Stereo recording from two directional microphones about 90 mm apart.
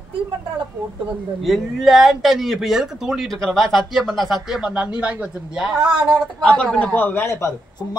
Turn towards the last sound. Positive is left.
turn(degrees=30)  # may be behind; listen again after turning